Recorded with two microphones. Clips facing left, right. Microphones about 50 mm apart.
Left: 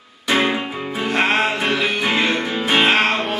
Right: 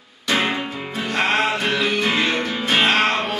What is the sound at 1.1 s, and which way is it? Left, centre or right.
Music, centre.